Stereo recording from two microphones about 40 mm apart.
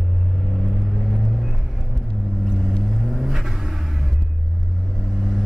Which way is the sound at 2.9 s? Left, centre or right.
Centre.